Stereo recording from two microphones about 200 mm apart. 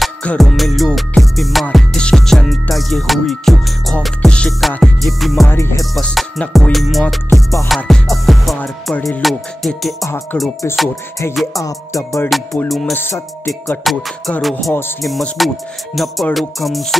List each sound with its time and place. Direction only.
0.0 s music: 5° left (ahead or behind)
5.5 s music: 15° left (ahead or behind)
5.9 s music: centre (ahead or behind)
11.5 s music: 15° left (ahead or behind)
12.3 s music: centre (ahead or behind)
12.9 s music: 10° left (ahead or behind)
13.5 s music: centre (ahead or behind)